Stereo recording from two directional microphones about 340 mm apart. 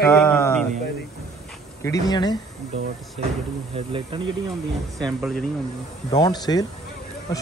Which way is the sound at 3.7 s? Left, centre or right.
Centre.